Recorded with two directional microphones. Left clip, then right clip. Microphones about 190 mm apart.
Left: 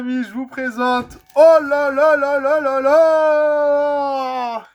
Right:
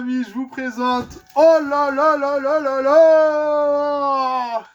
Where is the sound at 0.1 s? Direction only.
40° left (ahead or behind).